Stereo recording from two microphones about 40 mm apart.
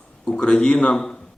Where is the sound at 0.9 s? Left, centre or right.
Centre.